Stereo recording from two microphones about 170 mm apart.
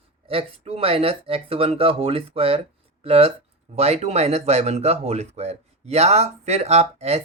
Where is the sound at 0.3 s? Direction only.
35° right (ahead or behind).